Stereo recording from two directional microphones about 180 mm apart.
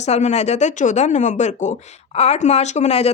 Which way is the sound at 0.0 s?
40° left (ahead or behind).